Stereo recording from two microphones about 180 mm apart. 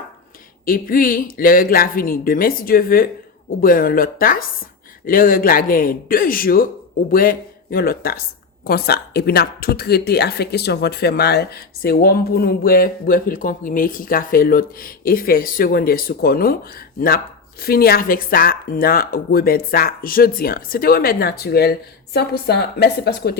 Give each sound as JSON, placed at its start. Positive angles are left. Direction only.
{"t": 0.6, "sound": "speech", "side_deg": 50}
{"t": 17.6, "sound": "speech", "side_deg": 60}